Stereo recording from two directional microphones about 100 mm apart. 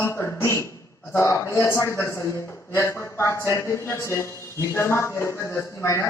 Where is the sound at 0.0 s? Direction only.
30° left (ahead or behind).